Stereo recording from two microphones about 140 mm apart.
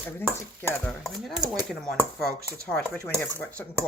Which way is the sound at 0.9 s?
Centre (ahead or behind).